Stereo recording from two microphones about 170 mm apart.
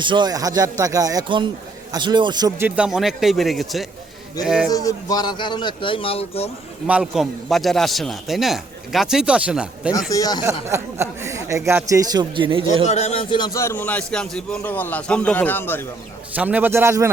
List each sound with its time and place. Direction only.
0.0 s speech: 25° right (ahead or behind)
2.6 s a man's voice: 10° right (ahead or behind)
4.7 s a man's voice: 20° left (ahead or behind)
6.8 s a man's voice: 5° right (ahead or behind)
10.1 s a man's voice: 20° left (ahead or behind)
10.4 s speech: 15° right (ahead or behind)
12.8 s a man's voice: 40° left (ahead or behind); by 15.9 s 10° left (ahead or behind)
16.3 s speech: 10° right (ahead or behind)